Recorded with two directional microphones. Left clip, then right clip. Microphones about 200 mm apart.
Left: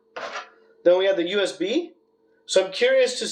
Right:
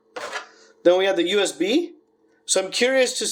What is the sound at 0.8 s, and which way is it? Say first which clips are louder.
Speech: right 1 dB; 50° right (ahead or behind).